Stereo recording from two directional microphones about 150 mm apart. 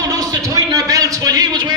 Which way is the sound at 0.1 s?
25° right (ahead or behind).